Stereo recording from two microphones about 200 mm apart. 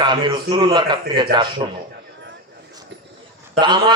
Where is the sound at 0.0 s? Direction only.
25° right (ahead or behind).